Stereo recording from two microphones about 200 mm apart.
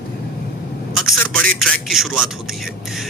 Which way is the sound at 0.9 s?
Centre (ahead or behind).